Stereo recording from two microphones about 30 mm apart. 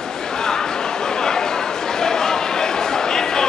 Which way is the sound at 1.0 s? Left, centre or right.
Left.